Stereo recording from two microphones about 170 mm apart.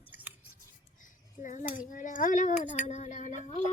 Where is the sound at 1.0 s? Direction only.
50° left (ahead or behind).